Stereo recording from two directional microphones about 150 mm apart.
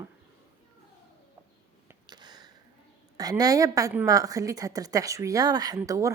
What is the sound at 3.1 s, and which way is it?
A woman's voice, 25° right (ahead or behind).